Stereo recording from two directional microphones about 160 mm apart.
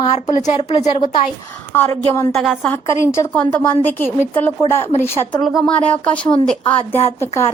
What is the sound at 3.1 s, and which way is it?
Speech, 10° left (ahead or behind).